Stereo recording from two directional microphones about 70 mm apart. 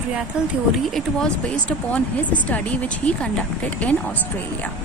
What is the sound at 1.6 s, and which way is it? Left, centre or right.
Speech, centre.